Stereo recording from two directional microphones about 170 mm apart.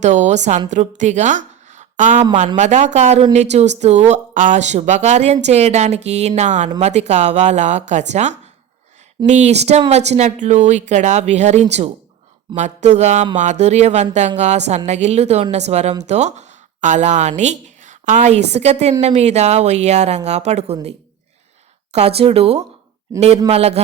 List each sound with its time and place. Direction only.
0.0 s a woman's voice: 45° right (ahead or behind)
21.9 s speech: 35° right (ahead or behind)